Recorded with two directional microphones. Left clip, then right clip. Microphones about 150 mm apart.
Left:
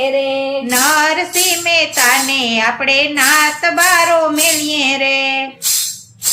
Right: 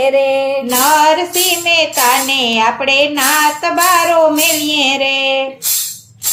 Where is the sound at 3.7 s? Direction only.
25° left (ahead or behind).